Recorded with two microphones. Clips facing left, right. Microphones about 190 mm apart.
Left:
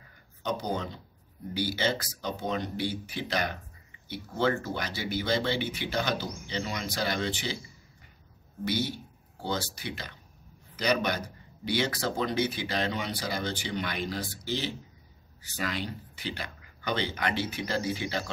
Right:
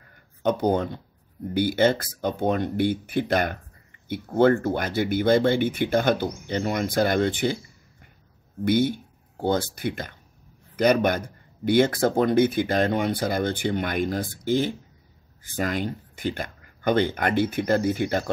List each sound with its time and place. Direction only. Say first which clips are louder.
0.4 s speech: right 9 dB; 55° right (ahead or behind)
8.6 s speech: right 9 dB; 55° right (ahead or behind)